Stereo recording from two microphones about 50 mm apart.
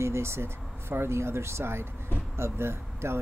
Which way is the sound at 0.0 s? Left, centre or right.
Right.